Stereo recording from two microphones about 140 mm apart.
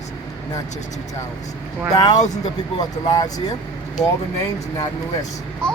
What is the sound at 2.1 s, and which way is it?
Speech, 55° left (ahead or behind).